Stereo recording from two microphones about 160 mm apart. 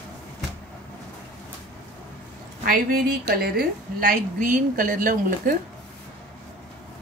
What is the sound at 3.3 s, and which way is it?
A woman's voice, 70° right (ahead or behind).